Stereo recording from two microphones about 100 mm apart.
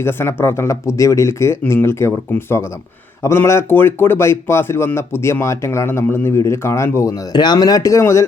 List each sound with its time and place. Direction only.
0.0 s speech: 25° left (ahead or behind)